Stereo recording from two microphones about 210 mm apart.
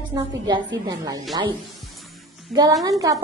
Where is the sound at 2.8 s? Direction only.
15° right (ahead or behind).